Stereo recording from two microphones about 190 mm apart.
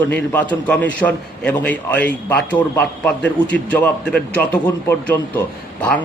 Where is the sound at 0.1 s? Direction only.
10° left (ahead or behind).